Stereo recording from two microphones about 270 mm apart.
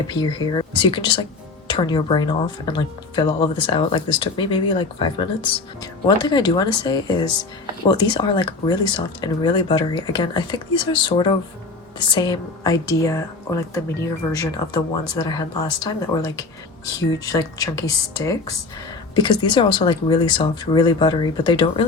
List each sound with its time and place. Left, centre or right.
0.1 s speech: centre